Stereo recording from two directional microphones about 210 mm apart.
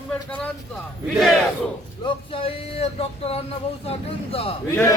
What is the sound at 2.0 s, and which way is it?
Speech, 25° left (ahead or behind).